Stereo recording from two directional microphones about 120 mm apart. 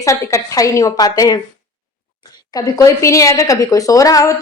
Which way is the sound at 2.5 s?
30° left (ahead or behind).